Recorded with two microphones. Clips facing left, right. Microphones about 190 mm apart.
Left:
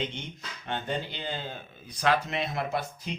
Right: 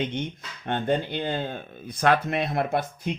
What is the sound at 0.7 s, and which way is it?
Speech, 55° right (ahead or behind).